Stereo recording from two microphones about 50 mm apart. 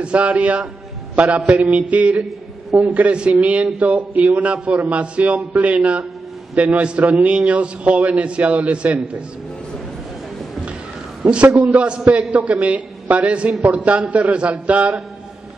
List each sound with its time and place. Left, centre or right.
0.0 s a man's voice: right
1.1 s mantra: right
1.5 s a man's voice: right
11.2 s a man's voice: right